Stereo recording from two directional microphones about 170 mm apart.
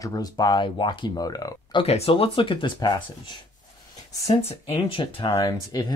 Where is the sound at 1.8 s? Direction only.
35° left (ahead or behind).